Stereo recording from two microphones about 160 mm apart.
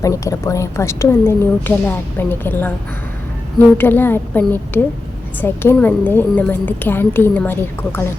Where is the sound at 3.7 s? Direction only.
10° left (ahead or behind).